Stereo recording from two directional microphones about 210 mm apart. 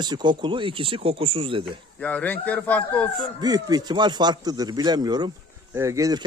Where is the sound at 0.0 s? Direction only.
20° right (ahead or behind).